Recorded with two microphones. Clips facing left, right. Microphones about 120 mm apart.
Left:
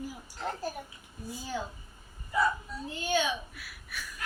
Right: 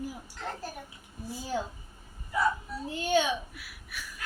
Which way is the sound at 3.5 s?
15° right (ahead or behind).